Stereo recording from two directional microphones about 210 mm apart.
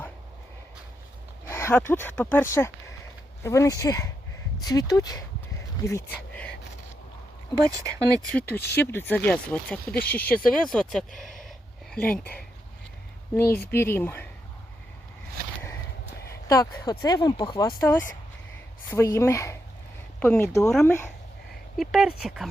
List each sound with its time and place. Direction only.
1.5 s speech: 10° left (ahead or behind)
7.8 s speech: 15° right (ahead or behind)
8.3 s speech: 5° left (ahead or behind)
13.3 s speech: 10° left (ahead or behind)
15.4 s a sound: 45° right (ahead or behind)
16.5 s speech: 15° left (ahead or behind)
20.7 s speech: centre (ahead or behind)